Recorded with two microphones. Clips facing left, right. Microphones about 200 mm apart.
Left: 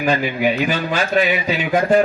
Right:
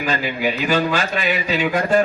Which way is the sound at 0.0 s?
50° left (ahead or behind).